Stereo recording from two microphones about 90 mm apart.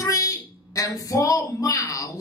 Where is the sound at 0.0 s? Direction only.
40° left (ahead or behind).